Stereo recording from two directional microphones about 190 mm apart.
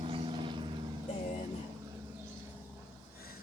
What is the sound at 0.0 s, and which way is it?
Vehicle, 25° right (ahead or behind).